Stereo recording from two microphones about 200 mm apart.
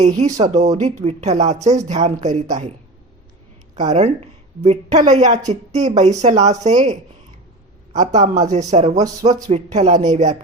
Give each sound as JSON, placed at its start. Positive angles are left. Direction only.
{"t": 0.0, "sound": "speech", "side_deg": -35}
{"t": 3.8, "sound": "speech", "side_deg": -35}
{"t": 7.9, "sound": "speech", "side_deg": -35}